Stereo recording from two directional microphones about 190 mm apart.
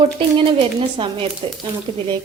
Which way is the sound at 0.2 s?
25° right (ahead or behind).